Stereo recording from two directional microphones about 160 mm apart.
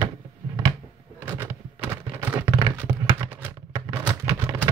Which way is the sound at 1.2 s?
15° right (ahead or behind).